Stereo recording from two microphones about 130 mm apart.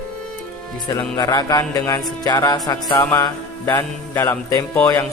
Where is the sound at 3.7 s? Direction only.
15° left (ahead or behind).